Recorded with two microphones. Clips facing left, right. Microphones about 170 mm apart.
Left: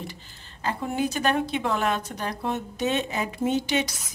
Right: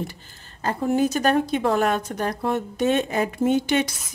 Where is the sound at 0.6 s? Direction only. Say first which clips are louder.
Right 6 dB; 45° right (ahead or behind).